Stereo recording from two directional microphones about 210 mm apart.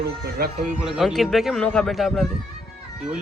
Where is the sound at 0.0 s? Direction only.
45° right (ahead or behind).